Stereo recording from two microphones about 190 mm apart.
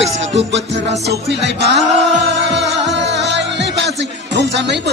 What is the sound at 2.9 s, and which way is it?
Music, 65° right (ahead or behind).